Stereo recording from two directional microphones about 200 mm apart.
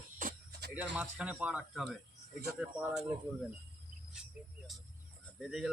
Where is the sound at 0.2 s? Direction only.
45° right (ahead or behind).